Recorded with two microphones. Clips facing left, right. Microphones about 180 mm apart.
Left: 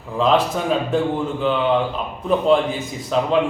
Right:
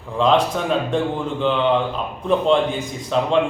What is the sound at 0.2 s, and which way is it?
A man's voice, 5° left (ahead or behind).